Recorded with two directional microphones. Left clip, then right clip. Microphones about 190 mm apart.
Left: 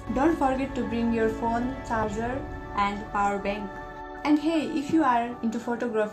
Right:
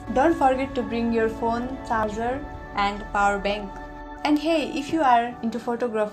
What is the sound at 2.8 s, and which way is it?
Speech, 50° right (ahead or behind).